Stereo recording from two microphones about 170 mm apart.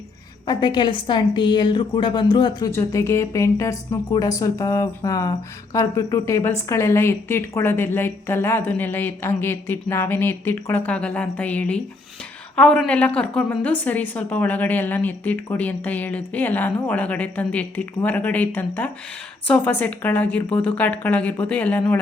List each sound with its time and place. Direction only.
0.4 s a woman's voice: 25° left (ahead or behind)
2.7 s a woman's voice: 15° left (ahead or behind)